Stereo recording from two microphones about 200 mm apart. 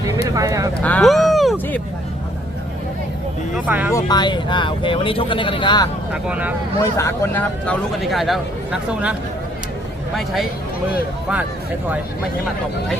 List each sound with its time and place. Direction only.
0.3 s speech: 15° right (ahead or behind)
0.8 s speech: 5° left (ahead or behind)
3.5 s speech: 10° right (ahead or behind)
3.9 s speech: 20° left (ahead or behind)
6.2 s speech: 5° right (ahead or behind)
6.7 s speech: 15° left (ahead or behind)
8.0 s speech: centre (ahead or behind)